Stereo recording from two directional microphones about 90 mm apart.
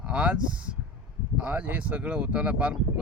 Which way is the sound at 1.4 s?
15° right (ahead or behind).